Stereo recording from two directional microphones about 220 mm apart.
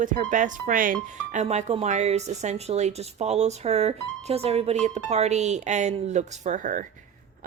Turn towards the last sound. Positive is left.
turn(degrees=-35)  # may be behind; listen again after turning